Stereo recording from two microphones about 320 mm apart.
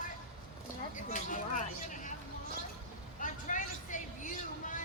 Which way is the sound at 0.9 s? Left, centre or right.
Left.